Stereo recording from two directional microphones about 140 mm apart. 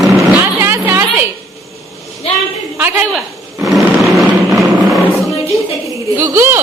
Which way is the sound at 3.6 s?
Centre (ahead or behind).